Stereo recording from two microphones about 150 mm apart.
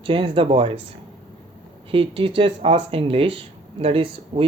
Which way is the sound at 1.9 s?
35° right (ahead or behind).